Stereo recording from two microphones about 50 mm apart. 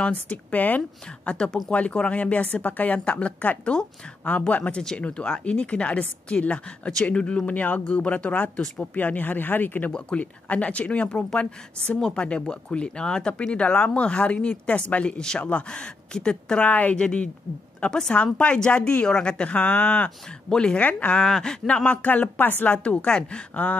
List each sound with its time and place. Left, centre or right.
0.0 s speech: left
9.9 s speech: left
16.6 s speech: left
20.8 s speech: left
21.2 s speech: centre
21.8 s speech: left
22.7 s speech: left
23.5 s speech: left